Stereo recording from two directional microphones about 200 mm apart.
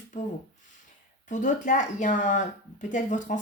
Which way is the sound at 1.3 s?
40° left (ahead or behind).